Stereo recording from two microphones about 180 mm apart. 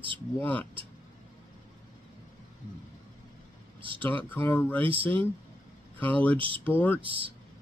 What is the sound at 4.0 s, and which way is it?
Speech, 10° left (ahead or behind).